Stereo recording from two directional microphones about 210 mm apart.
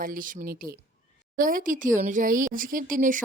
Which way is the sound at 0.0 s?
40° right (ahead or behind).